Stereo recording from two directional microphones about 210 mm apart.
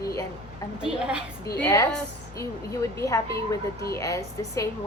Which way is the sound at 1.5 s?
10° left (ahead or behind).